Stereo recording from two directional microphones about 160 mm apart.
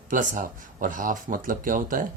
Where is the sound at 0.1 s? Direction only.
55° right (ahead or behind).